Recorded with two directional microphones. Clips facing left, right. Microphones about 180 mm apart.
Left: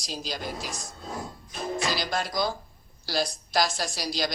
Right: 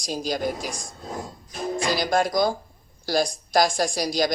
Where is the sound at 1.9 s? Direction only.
50° right (ahead or behind).